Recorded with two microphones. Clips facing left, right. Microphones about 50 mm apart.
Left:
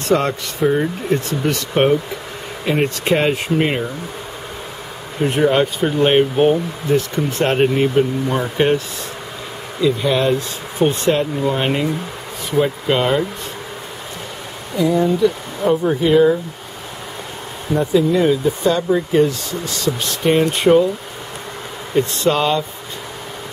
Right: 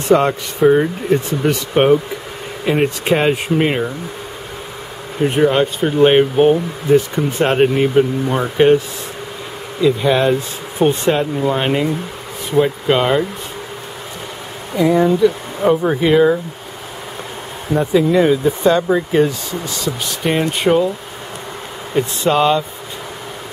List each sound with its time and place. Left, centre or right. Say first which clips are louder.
0.1 s speech: right 4 dB; centre
5.2 s speech: right 1 dB; centre
14.8 s speech: right 3 dB; right
17.7 s speech: right 2 dB; right
19.8 s speech: left 3 dB; centre
21.9 s speech: right 1 dB; centre